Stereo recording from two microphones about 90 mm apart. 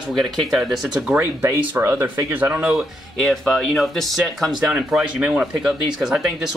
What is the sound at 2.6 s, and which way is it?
Speech, centre (ahead or behind).